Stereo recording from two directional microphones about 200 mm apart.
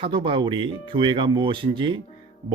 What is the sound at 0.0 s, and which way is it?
Speech, 25° right (ahead or behind).